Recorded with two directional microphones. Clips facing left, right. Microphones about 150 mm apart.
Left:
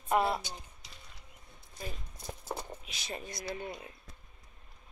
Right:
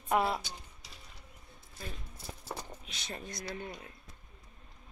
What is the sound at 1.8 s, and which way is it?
Clip-clop, 15° left (ahead or behind).